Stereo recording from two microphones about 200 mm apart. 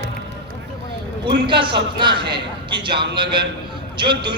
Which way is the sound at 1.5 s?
25° right (ahead or behind).